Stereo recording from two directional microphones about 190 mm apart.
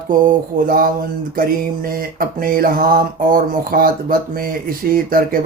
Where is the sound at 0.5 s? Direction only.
45° right (ahead or behind).